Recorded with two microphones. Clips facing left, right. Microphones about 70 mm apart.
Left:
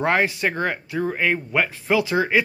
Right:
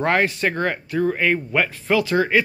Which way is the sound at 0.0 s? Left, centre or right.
Centre.